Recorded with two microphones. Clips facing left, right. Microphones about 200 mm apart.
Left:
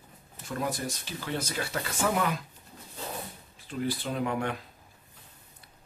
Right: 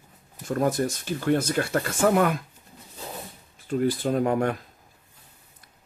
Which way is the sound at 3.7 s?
45° right (ahead or behind).